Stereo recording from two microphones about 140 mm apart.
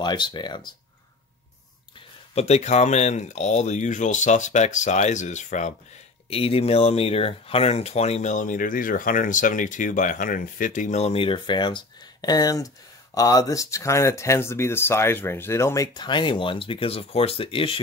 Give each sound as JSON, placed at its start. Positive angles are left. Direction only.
{"t": 0.0, "sound": "speech", "side_deg": 30}
{"t": 2.3, "sound": "speech", "side_deg": 50}
{"t": 6.3, "sound": "speech", "side_deg": 45}